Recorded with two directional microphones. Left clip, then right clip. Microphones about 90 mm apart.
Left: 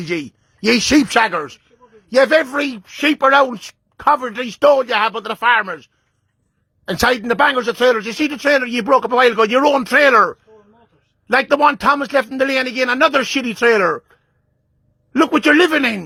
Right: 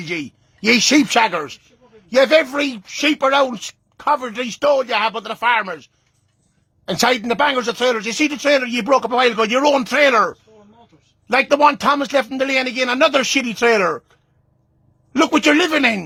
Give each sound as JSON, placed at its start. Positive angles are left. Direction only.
{"t": 0.0, "sound": "speech", "side_deg": 45}
{"t": 1.0, "sound": "speech", "side_deg": 25}
{"t": 3.9, "sound": "speech", "side_deg": 45}
{"t": 4.2, "sound": "speech", "side_deg": 30}
{"t": 6.8, "sound": "speech", "side_deg": 25}
{"t": 7.8, "sound": "speech", "side_deg": 40}
{"t": 11.9, "sound": "speech", "side_deg": 20}
{"t": 12.4, "sound": "a man's voice", "side_deg": 35}
{"t": 15.5, "sound": "speech", "side_deg": 40}